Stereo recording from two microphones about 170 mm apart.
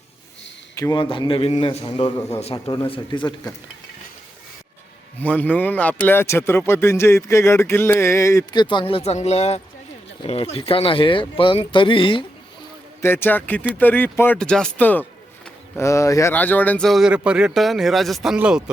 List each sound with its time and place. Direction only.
0.8 s speech: 20° left (ahead or behind)
1.0 s speech: 30° left (ahead or behind)
5.2 s speech: 10° left (ahead or behind); by 12.2 s 30° left (ahead or behind)
13.0 s speech: 15° left (ahead or behind); by 18.6 s 5° right (ahead or behind)